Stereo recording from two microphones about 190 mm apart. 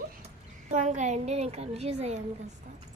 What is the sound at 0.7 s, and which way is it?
Child singing, 40° right (ahead or behind).